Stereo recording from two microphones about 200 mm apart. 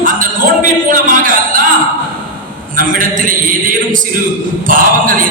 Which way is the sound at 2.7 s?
45° right (ahead or behind).